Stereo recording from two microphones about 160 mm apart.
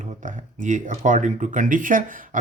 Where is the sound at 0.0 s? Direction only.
55° right (ahead or behind).